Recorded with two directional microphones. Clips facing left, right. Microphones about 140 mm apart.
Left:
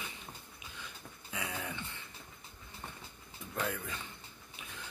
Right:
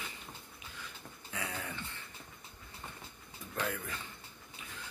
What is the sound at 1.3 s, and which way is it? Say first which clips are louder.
Dog: left 1 dB; 15° left (ahead or behind).